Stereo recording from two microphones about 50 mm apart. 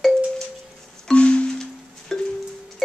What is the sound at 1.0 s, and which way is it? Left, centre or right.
Music, left.